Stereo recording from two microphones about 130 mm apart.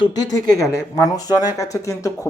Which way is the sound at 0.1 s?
30° left (ahead or behind).